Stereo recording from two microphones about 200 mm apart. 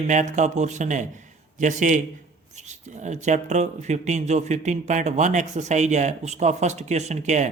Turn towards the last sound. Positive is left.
turn(degrees=-35)  # may be behind; listen again after turning